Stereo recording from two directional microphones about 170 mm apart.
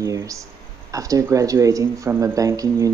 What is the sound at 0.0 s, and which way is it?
Speech, 20° right (ahead or behind).